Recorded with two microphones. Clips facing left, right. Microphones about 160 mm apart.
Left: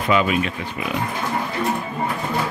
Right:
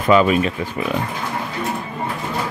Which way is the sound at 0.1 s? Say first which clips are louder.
Right 5 dB; 40° right (ahead or behind).